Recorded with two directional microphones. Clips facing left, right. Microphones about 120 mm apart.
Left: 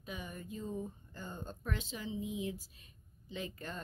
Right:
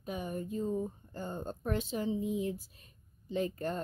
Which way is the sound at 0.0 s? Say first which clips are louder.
Right 8 dB; 45° right (ahead or behind).